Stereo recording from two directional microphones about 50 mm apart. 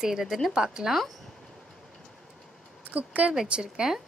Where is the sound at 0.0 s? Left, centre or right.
Centre.